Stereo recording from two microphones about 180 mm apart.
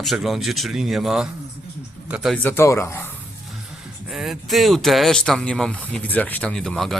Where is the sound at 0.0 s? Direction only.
Centre (ahead or behind).